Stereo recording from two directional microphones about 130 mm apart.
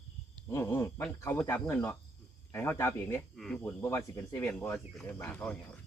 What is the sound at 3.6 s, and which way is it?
Speech, 20° left (ahead or behind).